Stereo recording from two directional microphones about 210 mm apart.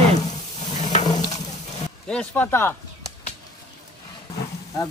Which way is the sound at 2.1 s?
5° left (ahead or behind).